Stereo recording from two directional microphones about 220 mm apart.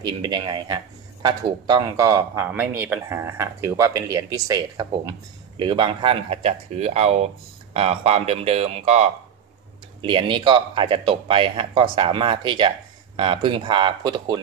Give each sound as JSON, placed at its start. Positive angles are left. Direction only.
{"t": 0.0, "sound": "a man's voice", "side_deg": -20}